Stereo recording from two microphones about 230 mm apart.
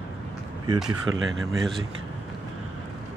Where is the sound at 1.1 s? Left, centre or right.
Right.